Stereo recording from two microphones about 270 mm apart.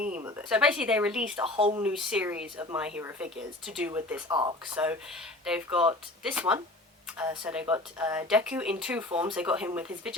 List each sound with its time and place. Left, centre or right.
0.0 s speech: centre
1.5 s speech: centre
1.8 s speech: centre